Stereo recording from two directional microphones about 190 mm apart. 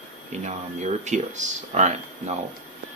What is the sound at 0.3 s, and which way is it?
Speech, 35° right (ahead or behind).